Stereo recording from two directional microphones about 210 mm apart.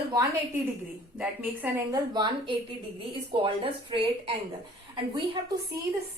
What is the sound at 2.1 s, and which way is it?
A woman's voice, 20° right (ahead or behind).